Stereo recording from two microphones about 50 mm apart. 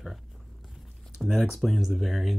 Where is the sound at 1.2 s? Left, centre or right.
Centre.